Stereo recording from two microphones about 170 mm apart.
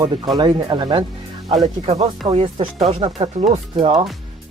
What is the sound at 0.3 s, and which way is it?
Speech, 25° right (ahead or behind).